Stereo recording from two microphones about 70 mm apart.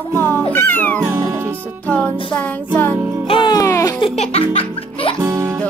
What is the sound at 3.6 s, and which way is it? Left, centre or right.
Music, left.